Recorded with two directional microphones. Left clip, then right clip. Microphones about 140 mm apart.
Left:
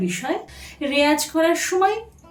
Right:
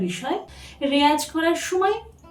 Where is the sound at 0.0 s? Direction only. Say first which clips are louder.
Left 2 dB; 35° left (ahead or behind).